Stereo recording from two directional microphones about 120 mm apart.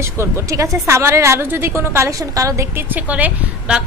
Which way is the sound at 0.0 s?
20° right (ahead or behind).